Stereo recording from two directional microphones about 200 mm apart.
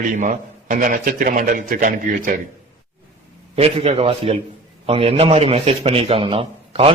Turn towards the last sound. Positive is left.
turn(degrees=-30)  # may be behind; listen again after turning